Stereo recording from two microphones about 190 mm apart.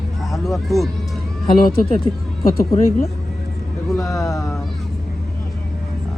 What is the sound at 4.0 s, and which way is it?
Speech, 15° left (ahead or behind).